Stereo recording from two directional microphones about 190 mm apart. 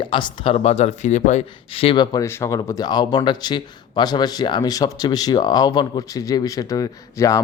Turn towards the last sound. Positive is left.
turn(degrees=15)  # may be behind; listen again after turning